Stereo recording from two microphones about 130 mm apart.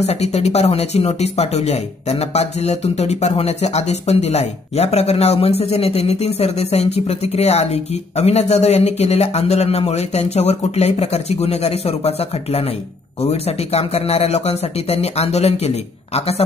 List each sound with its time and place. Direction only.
0.0 s speech: 55° left (ahead or behind)